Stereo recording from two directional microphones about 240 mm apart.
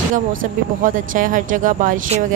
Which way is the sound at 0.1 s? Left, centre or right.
Right.